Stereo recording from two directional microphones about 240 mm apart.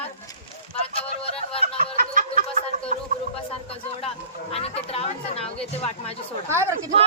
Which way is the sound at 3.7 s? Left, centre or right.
Left.